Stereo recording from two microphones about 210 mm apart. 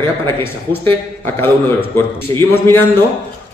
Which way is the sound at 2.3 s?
15° left (ahead or behind).